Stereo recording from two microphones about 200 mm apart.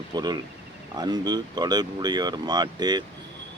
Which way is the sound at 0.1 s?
20° right (ahead or behind).